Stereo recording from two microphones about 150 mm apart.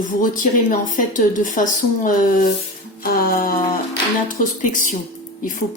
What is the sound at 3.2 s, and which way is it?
Speech, 75° left (ahead or behind).